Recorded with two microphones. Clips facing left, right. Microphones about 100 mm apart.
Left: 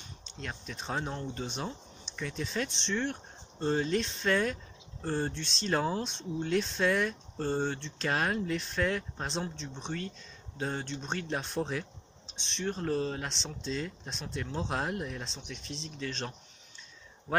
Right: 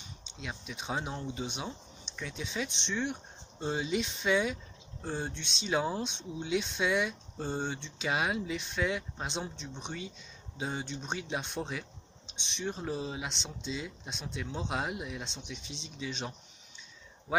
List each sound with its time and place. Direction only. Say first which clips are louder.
0.4 s speech: left 1 dB; 5° right (ahead or behind)